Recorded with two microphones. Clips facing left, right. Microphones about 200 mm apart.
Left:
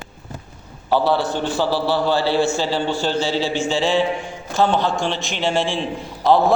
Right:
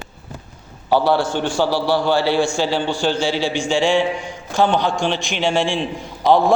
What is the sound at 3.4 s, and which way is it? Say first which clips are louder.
A man's voice: right 2 dB; 5° left (ahead or behind).